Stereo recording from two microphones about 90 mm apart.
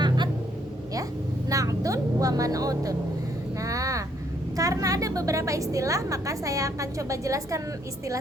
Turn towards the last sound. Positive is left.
turn(degrees=-35)  # may be behind; listen again after turning